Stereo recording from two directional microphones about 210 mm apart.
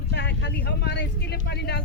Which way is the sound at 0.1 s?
55° left (ahead or behind).